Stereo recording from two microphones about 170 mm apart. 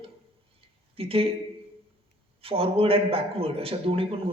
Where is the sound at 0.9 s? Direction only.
35° right (ahead or behind).